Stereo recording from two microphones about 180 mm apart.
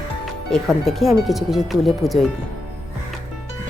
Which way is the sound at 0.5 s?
Centre (ahead or behind).